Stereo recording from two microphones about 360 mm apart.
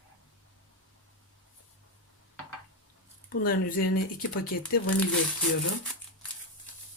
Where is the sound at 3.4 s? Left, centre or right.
Left.